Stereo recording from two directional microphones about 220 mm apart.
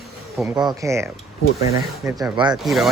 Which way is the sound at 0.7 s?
15° right (ahead or behind).